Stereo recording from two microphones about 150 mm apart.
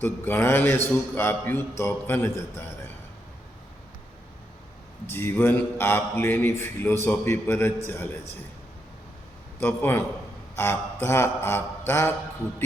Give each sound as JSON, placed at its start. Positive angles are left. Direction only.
{"t": 0.0, "sound": "a man's voice", "side_deg": 15}
{"t": 5.0, "sound": "a man's voice", "side_deg": 15}
{"t": 9.6, "sound": "a man's voice", "side_deg": 15}